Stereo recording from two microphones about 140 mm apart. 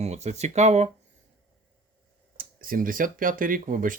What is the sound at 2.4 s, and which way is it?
Speech, 90° right.